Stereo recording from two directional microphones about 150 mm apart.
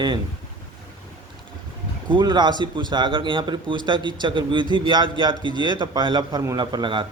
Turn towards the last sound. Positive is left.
turn(degrees=-30)  # may be behind; listen again after turning